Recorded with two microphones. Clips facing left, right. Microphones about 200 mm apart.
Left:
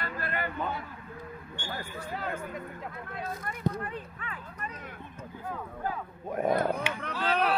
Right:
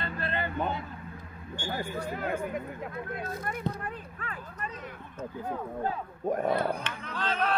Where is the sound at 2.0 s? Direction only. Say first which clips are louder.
Right 2 dB; 50° right (ahead or behind).